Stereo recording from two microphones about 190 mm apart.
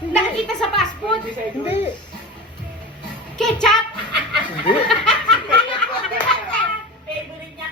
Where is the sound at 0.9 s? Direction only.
25° left (ahead or behind).